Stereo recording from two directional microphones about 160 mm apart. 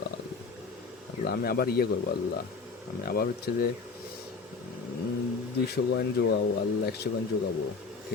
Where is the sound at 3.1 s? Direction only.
70° left (ahead or behind).